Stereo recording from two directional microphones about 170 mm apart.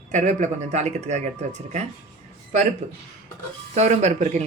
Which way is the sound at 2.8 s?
45° right (ahead or behind).